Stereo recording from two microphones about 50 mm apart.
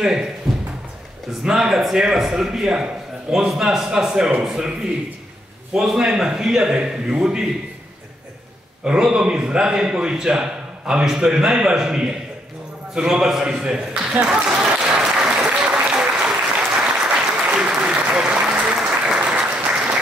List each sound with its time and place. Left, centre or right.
0.0 s a man's voice: centre
1.4 s a man's voice: centre
5.8 s a man's voice: centre
8.8 s a man's voice: centre
12.9 s a sound: centre
15.9 s applause: centre